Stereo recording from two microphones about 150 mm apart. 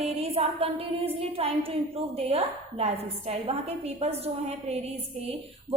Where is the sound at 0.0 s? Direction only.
40° right (ahead or behind).